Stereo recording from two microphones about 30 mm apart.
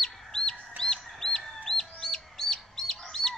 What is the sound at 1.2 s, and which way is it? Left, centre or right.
Chicken, centre.